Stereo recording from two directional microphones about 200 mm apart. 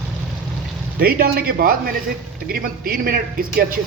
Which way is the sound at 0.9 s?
50° right (ahead or behind).